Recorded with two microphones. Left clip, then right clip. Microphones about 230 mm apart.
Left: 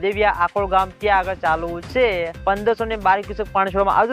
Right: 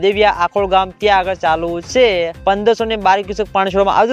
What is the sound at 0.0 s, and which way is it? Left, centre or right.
Speech, right.